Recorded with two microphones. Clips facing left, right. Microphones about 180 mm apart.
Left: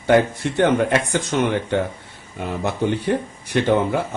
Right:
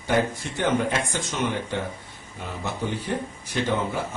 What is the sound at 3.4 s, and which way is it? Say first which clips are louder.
Speech: left 8 dB; 65° left (ahead or behind).